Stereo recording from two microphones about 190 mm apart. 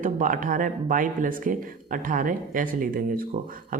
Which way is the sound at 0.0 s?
45° right (ahead or behind).